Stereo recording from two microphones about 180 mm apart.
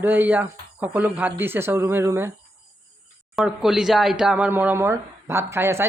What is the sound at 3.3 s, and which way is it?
Speech, centre (ahead or behind).